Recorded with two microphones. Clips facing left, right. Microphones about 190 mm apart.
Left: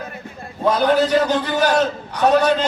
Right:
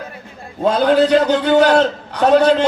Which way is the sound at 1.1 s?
70° right (ahead or behind).